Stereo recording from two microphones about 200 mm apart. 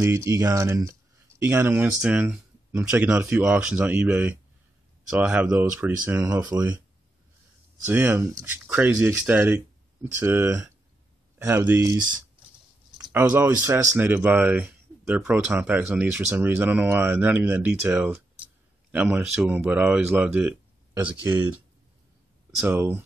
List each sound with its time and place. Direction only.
0.0 s speech: 15° right (ahead or behind)
7.8 s speech: 10° right (ahead or behind)
22.7 s speech: 10° right (ahead or behind)